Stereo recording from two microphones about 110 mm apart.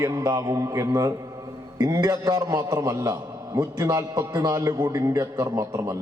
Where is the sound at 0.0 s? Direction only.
35° right (ahead or behind).